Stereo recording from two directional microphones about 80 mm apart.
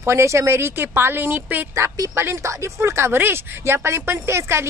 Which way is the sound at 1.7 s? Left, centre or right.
Right.